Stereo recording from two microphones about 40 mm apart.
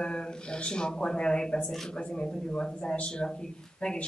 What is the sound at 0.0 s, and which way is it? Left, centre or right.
Speech, left.